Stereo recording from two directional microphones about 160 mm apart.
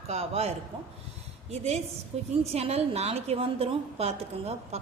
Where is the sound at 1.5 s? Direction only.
40° right (ahead or behind).